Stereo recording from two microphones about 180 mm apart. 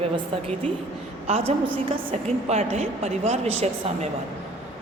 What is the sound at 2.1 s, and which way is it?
A woman's voice, 40° right (ahead or behind).